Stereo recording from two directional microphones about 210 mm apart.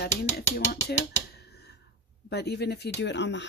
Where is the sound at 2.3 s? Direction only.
50° left (ahead or behind).